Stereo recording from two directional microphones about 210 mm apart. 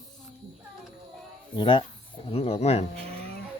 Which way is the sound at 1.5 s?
25° left (ahead or behind).